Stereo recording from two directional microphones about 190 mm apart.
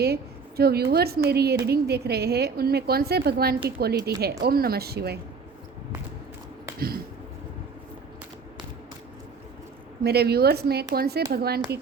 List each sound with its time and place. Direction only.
0.0 s a woman's voice: 55° right (ahead or behind)
6.7 s a sound: 50° right (ahead or behind)
10.0 s a woman's voice: 55° right (ahead or behind)